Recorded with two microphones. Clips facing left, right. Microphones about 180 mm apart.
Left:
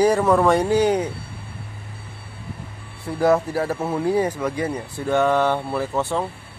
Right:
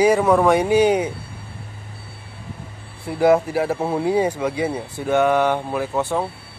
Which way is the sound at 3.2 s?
15° right (ahead or behind).